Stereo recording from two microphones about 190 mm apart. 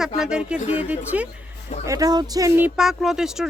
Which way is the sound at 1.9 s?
20° right (ahead or behind).